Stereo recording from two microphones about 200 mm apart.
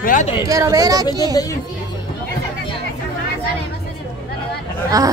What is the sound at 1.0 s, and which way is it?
Speech, 20° left (ahead or behind).